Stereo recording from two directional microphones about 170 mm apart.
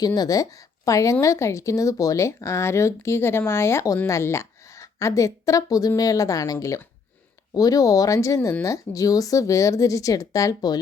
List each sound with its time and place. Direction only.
0.0 s speech: 20° left (ahead or behind)